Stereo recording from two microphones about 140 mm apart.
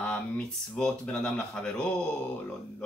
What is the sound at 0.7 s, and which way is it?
Speech, 5° left (ahead or behind).